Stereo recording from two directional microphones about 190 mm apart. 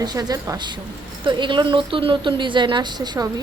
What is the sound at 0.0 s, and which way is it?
A woman's voice, 20° right (ahead or behind).